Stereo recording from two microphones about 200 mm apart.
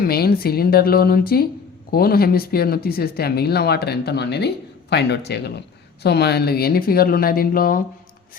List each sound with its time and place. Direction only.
0.0 s speech: 50° left (ahead or behind)